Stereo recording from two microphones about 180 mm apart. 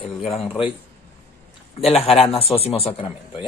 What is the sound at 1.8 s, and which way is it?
A man's voice, 35° left (ahead or behind).